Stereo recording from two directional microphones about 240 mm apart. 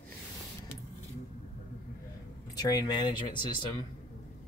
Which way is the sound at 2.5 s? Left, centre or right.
Centre.